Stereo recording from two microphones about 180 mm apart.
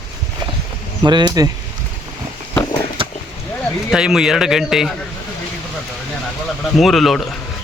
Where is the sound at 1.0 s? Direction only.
25° right (ahead or behind).